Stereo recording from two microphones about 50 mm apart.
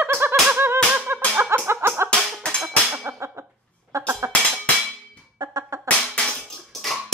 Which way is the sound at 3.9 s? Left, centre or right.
Right.